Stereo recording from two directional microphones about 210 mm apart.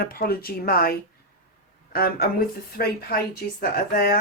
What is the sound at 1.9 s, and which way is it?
Speech, 45° left (ahead or behind).